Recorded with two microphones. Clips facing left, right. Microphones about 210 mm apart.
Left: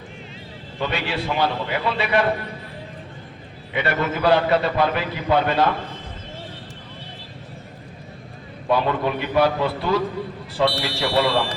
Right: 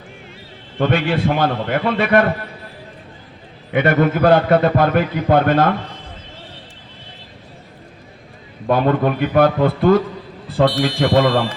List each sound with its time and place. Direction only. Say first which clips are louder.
0.8 s a man's voice: right 8 dB; 50° right (ahead or behind)
3.7 s a man's voice: right 8 dB; 50° right (ahead or behind)
8.6 s a man's voice: right 5 dB; 50° right (ahead or behind)